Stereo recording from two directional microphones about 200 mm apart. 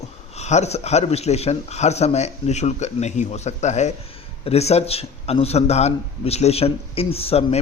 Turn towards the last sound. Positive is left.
turn(degrees=30)  # may be behind; listen again after turning